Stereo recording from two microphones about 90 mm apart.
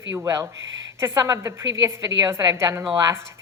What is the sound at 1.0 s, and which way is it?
A woman's voice, 35° right (ahead or behind).